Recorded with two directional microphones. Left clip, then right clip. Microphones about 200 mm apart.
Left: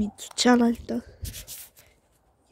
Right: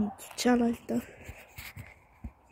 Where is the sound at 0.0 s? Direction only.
15° left (ahead or behind).